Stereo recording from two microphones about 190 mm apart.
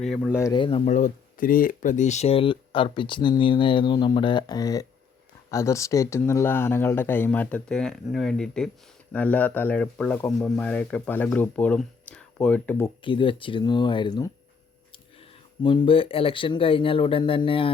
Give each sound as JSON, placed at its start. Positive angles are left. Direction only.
{"t": 0.0, "sound": "speech", "side_deg": 5}
{"t": 0.4, "sound": "speech", "side_deg": 25}
{"t": 0.9, "sound": "speech", "side_deg": 40}
{"t": 13.0, "sound": "speech", "side_deg": 25}
{"t": 15.6, "sound": "speech", "side_deg": 25}